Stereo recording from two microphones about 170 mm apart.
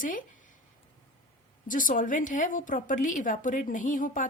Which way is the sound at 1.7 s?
50° left (ahead or behind).